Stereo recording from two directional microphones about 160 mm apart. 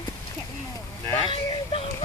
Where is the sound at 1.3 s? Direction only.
35° left (ahead or behind).